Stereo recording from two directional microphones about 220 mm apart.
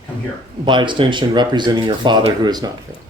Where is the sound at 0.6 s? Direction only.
20° right (ahead or behind).